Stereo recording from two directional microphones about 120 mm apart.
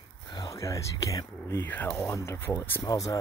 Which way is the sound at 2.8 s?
30° left (ahead or behind).